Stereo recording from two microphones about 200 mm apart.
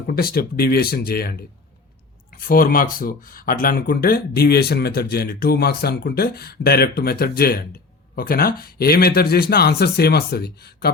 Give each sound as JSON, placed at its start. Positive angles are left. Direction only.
{"t": 0.2, "sound": "speech", "side_deg": 50}
{"t": 2.5, "sound": "speech", "side_deg": 45}